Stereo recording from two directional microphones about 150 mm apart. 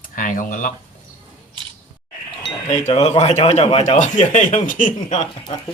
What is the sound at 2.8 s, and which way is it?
Speech, 45° left (ahead or behind).